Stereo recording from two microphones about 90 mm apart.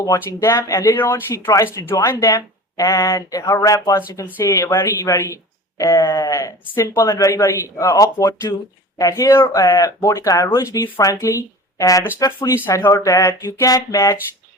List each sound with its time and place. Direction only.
0.0 s speech: 40° left (ahead or behind)